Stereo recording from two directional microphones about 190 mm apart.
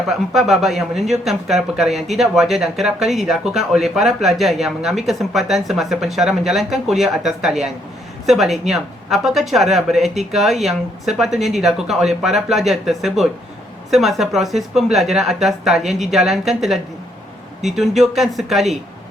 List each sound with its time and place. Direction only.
0.3 s speech: centre (ahead or behind)